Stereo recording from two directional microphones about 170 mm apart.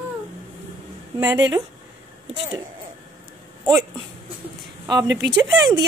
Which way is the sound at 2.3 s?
30° right (ahead or behind).